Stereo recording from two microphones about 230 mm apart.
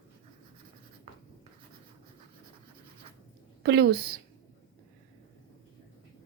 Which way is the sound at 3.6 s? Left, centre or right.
Right.